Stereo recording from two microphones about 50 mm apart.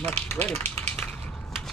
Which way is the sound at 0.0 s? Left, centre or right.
Left.